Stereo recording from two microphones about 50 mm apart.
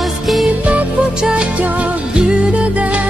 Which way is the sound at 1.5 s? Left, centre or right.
Right.